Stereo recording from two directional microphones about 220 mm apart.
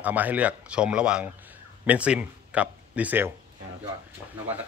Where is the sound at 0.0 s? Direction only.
5° right (ahead or behind).